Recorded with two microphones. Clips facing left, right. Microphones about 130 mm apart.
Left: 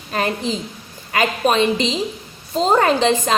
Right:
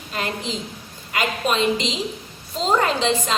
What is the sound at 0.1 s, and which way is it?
A woman's voice, 45° left (ahead or behind).